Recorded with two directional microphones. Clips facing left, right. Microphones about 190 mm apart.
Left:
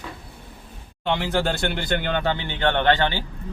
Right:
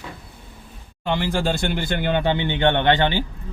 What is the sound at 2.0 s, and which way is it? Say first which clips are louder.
Speech: right 4 dB; 15° right (ahead or behind).